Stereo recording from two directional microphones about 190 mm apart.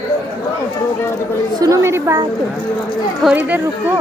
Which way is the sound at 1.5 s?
20° right (ahead or behind).